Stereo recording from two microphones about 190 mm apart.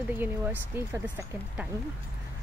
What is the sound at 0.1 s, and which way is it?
Speech, 10° right (ahead or behind).